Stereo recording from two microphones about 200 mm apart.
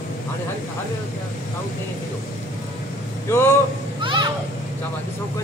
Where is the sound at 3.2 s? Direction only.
10° left (ahead or behind).